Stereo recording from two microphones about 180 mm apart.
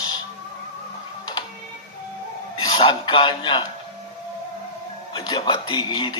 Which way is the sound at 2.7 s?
30° left (ahead or behind).